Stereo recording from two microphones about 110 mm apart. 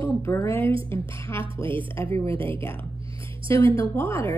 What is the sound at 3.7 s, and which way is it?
Speech, 25° left (ahead or behind).